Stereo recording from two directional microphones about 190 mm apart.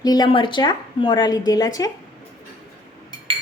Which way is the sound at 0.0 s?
20° left (ahead or behind).